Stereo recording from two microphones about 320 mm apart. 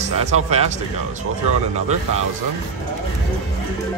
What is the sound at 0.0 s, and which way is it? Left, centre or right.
Speech, right.